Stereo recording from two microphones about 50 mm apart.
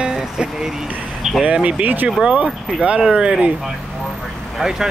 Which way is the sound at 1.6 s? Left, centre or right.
Right.